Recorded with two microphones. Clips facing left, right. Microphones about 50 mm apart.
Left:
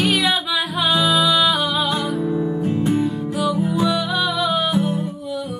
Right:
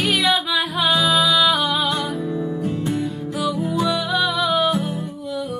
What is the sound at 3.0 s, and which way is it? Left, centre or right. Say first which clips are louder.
Music: left 3 dB; centre.